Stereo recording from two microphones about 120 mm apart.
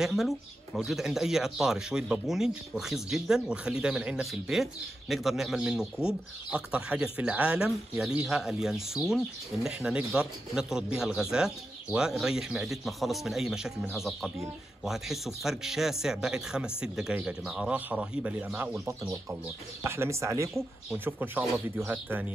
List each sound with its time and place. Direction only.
0.0 s speech: centre (ahead or behind)
19.8 s speech: 20° right (ahead or behind)